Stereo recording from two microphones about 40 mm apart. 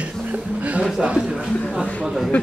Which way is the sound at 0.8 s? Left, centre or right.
Right.